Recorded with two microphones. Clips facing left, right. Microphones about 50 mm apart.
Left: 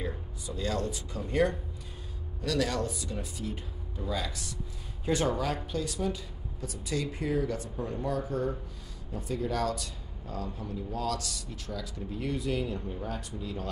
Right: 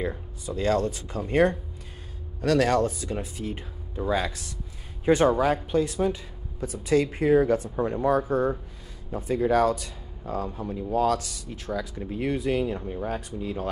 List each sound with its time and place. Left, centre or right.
0.5 s speech: right
5.3 s speech: right
6.9 s speech: right